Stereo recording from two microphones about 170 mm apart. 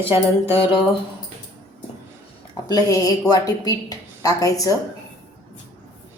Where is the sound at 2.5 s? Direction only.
20° left (ahead or behind).